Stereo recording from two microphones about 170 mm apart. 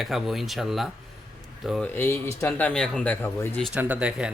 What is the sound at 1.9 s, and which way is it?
Speech, 10° left (ahead or behind).